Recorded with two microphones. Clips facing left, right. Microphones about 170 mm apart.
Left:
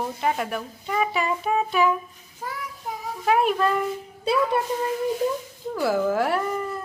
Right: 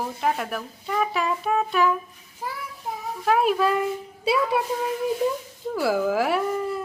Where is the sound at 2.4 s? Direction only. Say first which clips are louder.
Right 1 dB; 5° right (ahead or behind).